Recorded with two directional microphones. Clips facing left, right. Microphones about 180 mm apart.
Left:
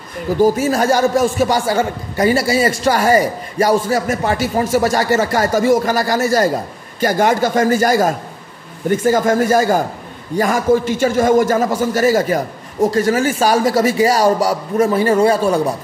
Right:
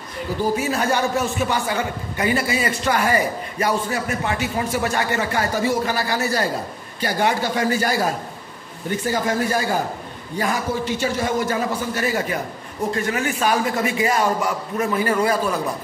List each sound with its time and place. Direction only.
0.4 s a man's voice: 45° left (ahead or behind)